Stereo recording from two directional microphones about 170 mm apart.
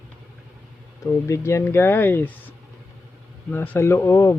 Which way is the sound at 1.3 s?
15° left (ahead or behind).